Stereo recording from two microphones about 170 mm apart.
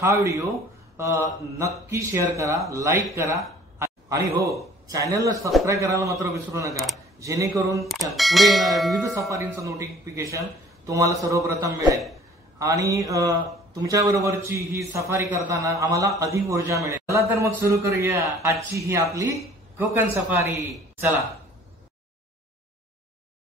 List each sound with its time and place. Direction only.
0.0 s a man's voice: 20° right (ahead or behind)
8.2 s speech: centre (ahead or behind)
9.1 s a man's voice: 15° right (ahead or behind)